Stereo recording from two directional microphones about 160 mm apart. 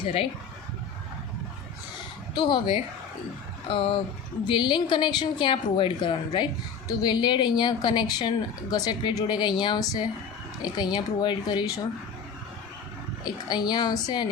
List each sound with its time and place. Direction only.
0.0 s speech: 35° left (ahead or behind)
2.3 s a woman's voice: 30° left (ahead or behind)
13.2 s a woman's voice: 25° left (ahead or behind)